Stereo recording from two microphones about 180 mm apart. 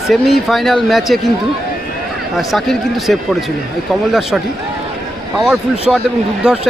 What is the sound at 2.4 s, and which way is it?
Speech, centre (ahead or behind).